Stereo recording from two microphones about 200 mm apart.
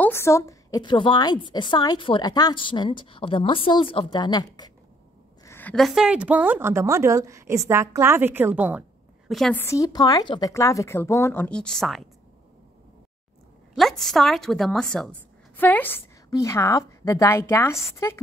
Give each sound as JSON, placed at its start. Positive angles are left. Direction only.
{"t": 0.0, "sound": "a woman's voice", "side_deg": 15}
{"t": 9.3, "sound": "a woman's voice", "side_deg": 5}
{"t": 13.7, "sound": "a woman's voice", "side_deg": 0}